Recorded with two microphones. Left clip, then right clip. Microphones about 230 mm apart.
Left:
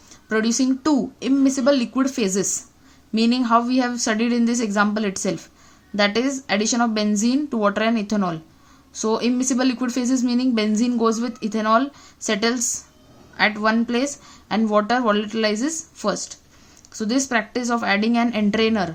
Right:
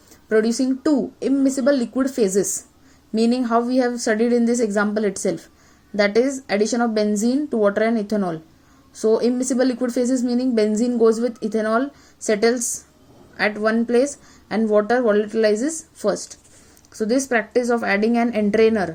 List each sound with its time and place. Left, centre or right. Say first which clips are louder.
0.3 s a woman's voice: right 2 dB; left